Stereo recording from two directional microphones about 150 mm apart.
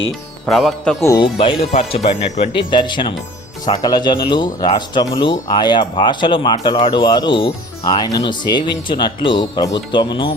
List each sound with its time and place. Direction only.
0.4 s speech: centre (ahead or behind)
1.2 s speech: 35° left (ahead or behind)
2.5 s speech: 35° left (ahead or behind)